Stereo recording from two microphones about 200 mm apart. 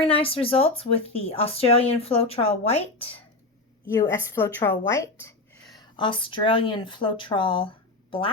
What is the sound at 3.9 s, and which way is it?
A woman's voice, 15° left (ahead or behind).